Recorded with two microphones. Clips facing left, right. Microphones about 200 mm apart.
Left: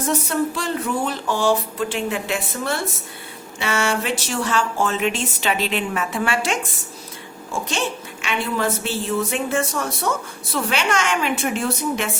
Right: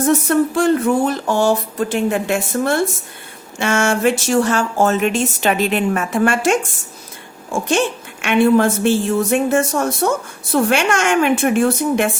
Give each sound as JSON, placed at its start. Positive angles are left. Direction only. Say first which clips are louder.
{"t": 0.0, "sound": "speech", "louder": "right 7 dB", "side_deg": -50}
{"t": 8.2, "sound": "speech", "louder": "right 11 dB", "side_deg": -55}